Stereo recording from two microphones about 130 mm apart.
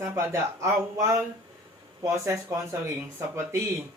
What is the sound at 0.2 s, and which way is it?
Speech, 20° right (ahead or behind).